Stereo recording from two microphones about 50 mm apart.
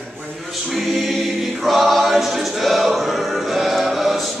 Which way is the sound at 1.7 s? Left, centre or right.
Centre.